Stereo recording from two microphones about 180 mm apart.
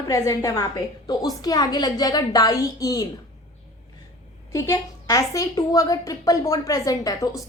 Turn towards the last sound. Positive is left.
turn(degrees=20)  # may be behind; listen again after turning